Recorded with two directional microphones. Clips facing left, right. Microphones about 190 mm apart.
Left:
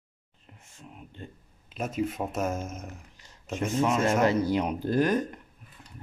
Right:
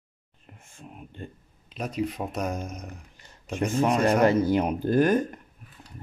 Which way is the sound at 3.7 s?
50° right (ahead or behind).